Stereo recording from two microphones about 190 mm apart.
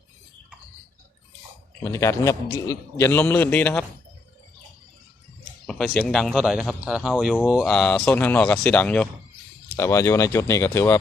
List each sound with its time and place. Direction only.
1.8 s a man's voice: 15° left (ahead or behind)
5.6 s a man's voice: 5° left (ahead or behind)